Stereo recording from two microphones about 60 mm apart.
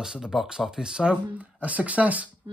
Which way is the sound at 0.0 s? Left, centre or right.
Centre.